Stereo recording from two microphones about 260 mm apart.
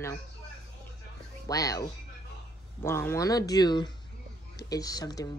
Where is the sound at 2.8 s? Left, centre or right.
Centre.